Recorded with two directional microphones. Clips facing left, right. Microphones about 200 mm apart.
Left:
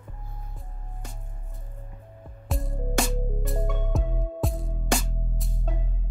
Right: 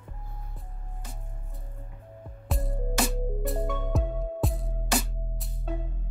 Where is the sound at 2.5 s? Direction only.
Centre (ahead or behind).